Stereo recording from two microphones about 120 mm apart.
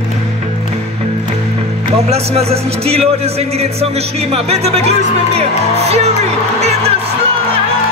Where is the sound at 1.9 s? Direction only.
60° right (ahead or behind).